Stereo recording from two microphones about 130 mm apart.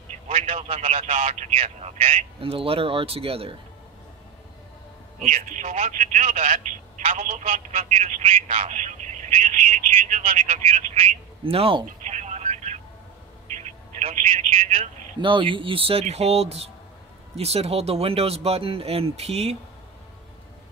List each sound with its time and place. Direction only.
0.3 s a man's voice: 55° right (ahead or behind)
5.2 s speech: 65° right (ahead or behind)
11.4 s a man's voice: 45° right (ahead or behind)
12.0 s vehicle: 65° right (ahead or behind)
13.6 s telephone: 65° right (ahead or behind)
15.2 s a man's voice: 40° right (ahead or behind)